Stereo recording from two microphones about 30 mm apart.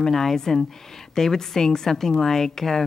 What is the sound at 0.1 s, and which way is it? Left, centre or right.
Speech, centre.